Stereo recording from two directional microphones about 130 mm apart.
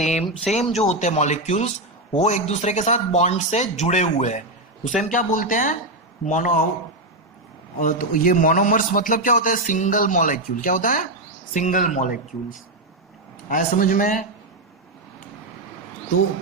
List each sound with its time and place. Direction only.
0.0 s speech: 60° left (ahead or behind)
5.0 s speech: 90° left
7.8 s a man's voice: 90° left
11.5 s speech: 75° left (ahead or behind)
13.5 s a man's voice: 90° left